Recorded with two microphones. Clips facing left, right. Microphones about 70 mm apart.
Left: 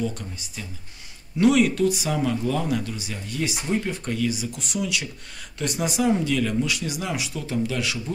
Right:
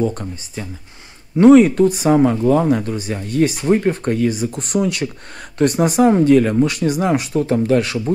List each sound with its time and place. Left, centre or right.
0.0 s speech: right